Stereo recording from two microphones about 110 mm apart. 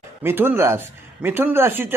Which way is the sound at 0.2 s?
20° right (ahead or behind).